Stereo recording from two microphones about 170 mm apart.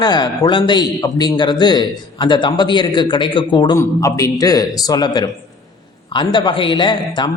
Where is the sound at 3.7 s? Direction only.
15° left (ahead or behind).